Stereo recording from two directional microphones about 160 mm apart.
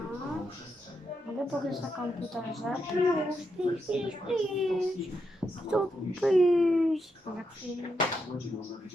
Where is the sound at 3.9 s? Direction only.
5° right (ahead or behind).